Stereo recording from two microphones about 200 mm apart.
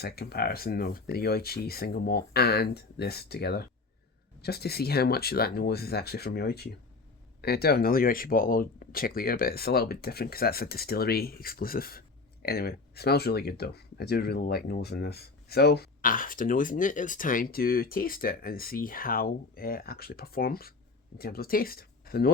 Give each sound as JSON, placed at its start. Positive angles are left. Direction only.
{"t": 0.0, "sound": "speech", "side_deg": 50}